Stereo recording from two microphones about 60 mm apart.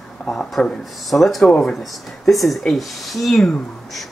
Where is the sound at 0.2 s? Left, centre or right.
Left.